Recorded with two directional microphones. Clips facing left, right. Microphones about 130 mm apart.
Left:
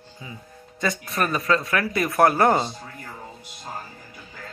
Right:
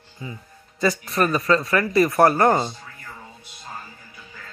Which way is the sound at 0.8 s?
Centre (ahead or behind).